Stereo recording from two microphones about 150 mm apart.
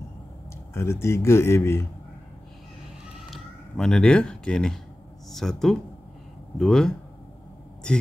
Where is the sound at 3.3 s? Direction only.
5° left (ahead or behind).